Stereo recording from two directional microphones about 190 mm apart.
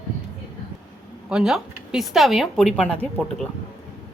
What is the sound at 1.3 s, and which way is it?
Speech, 5° right (ahead or behind).